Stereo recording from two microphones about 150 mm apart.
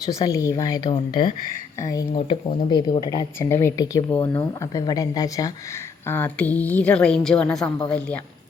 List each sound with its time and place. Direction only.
0.0 s speech: 25° left (ahead or behind)
6.1 s a woman's voice: 10° left (ahead or behind)